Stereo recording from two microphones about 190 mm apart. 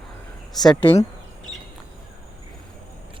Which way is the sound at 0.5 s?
Centre (ahead or behind).